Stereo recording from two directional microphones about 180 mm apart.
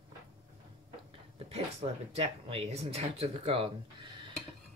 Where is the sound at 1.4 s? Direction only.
35° right (ahead or behind).